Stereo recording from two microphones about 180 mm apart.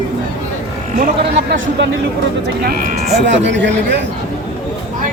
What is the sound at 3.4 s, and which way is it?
Speech, 80° right.